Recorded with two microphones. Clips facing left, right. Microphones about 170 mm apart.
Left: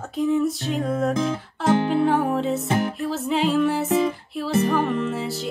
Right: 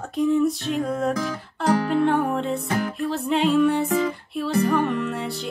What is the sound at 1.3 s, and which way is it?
Music, 25° left (ahead or behind).